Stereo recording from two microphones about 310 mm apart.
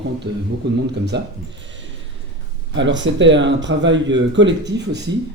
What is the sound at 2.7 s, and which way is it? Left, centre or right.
Speech, right.